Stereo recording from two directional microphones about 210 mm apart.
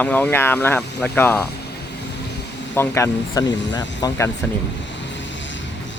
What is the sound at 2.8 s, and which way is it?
Speech, 15° left (ahead or behind).